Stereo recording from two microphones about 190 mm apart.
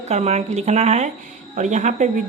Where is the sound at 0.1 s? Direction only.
35° right (ahead or behind).